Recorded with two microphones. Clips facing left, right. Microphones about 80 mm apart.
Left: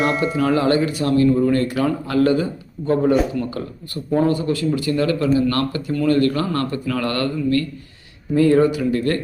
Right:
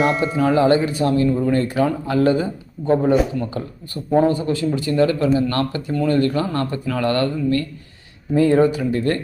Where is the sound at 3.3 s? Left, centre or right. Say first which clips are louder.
Even; right.